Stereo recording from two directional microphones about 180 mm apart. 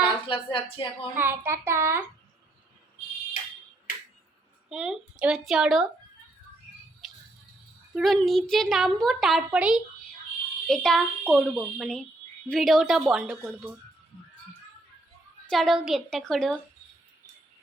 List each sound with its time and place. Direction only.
0.0 s a woman's voice: 30° left (ahead or behind)
1.1 s a child's voice: 10° right (ahead or behind)
4.7 s a child's voice: 5° right (ahead or behind)
7.9 s a child's voice: centre (ahead or behind)
15.4 s a child's voice: centre (ahead or behind)